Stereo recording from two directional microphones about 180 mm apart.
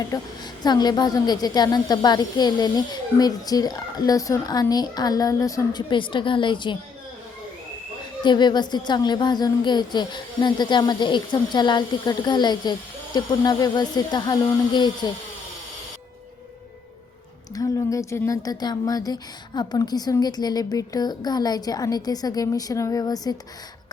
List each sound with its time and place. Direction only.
0.1 s a woman's voice: 20° left (ahead or behind)
8.2 s a woman's voice: 25° left (ahead or behind)
17.5 s a woman's voice: 20° left (ahead or behind)